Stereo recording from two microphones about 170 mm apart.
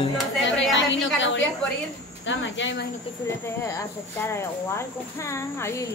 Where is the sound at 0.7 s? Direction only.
90° left.